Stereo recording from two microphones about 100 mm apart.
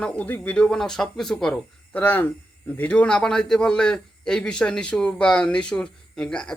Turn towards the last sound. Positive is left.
turn(degrees=10)  # may be behind; listen again after turning